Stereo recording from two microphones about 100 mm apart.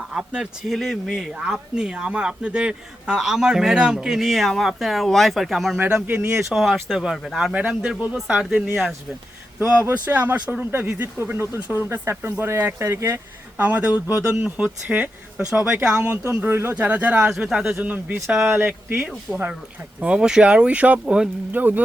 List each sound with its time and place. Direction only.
0.1 s speech: 5° right (ahead or behind)
5.8 s speech: 15° right (ahead or behind)
6.5 s speech: 5° right (ahead or behind)
9.6 s speech: 20° right (ahead or behind)
13.6 s speech: 15° right (ahead or behind)
17.7 s speech: 20° right (ahead or behind)
18.9 s speech: 5° right (ahead or behind)